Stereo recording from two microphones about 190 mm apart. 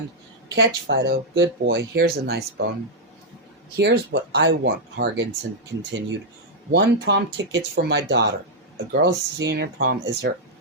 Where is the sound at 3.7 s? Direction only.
60° right (ahead or behind).